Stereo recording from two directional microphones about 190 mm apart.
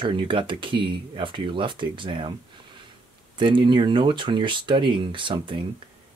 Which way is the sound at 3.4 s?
25° right (ahead or behind).